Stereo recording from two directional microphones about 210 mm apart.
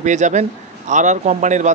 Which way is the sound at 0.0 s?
35° right (ahead or behind).